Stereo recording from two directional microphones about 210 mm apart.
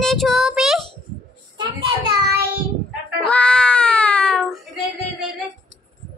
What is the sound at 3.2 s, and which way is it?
Baby cry, 5° left (ahead or behind).